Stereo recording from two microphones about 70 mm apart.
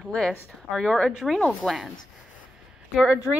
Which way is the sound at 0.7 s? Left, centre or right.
Centre.